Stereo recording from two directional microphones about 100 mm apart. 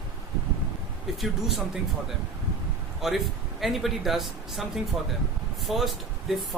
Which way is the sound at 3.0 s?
5° right (ahead or behind).